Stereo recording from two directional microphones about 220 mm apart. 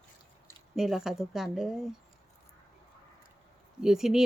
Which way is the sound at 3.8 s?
Centre (ahead or behind).